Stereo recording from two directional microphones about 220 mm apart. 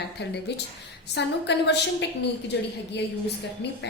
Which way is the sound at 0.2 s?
50° left (ahead or behind).